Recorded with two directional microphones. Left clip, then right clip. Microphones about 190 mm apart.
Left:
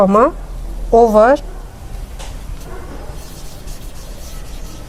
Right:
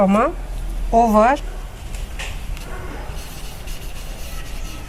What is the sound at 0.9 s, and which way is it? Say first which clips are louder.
Speech: left 5 dB; 60° left (ahead or behind).